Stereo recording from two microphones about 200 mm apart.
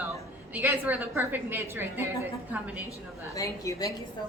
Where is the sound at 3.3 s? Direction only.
15° left (ahead or behind).